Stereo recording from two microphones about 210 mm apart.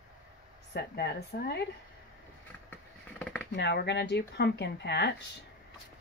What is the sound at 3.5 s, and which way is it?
Speech, 55° left (ahead or behind).